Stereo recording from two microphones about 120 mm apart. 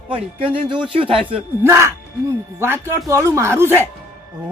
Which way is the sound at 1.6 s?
20° right (ahead or behind).